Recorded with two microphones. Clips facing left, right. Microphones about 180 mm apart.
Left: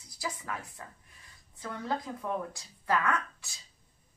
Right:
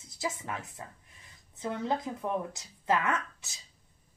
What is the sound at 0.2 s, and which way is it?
Speech, 25° right (ahead or behind).